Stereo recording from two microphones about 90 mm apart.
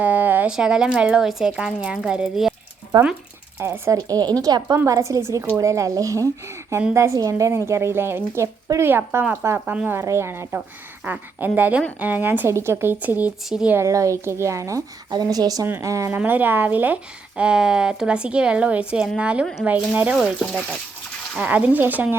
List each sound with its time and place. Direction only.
0.0 s a sound: 20° right (ahead or behind)
0.5 s speech: 5° right (ahead or behind)
3.6 s speech: 25° right (ahead or behind)
3.9 s a woman's voice: 45° right (ahead or behind)
4.9 s a woman's voice: 35° right (ahead or behind); by 13.7 s 10° right (ahead or behind)
13.7 s a woman's voice: 35° right (ahead or behind)
16.1 s speech: 20° right (ahead or behind)
20.1 s speech: 5° right (ahead or behind)
21.3 s speech: 15° right (ahead or behind)